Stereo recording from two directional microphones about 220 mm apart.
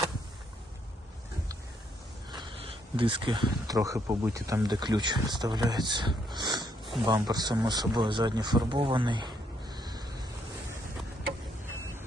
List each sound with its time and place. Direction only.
2.3 s speech: 20° right (ahead or behind)